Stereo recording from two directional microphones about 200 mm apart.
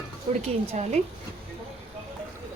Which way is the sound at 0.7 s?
35° right (ahead or behind).